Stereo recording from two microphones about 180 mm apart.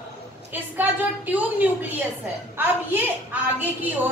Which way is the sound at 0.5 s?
10° right (ahead or behind).